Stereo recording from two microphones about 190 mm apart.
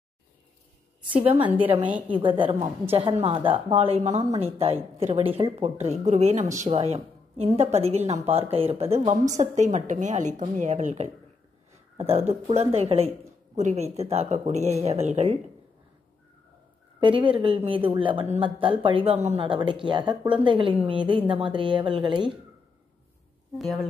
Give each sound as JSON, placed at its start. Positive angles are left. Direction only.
{"t": 1.4, "sound": "a woman's voice", "side_deg": -10}
{"t": 2.0, "sound": "a woman's voice", "side_deg": -25}
{"t": 17.0, "sound": "a woman's voice", "side_deg": -25}